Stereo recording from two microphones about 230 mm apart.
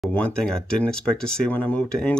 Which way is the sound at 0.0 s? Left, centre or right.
Centre.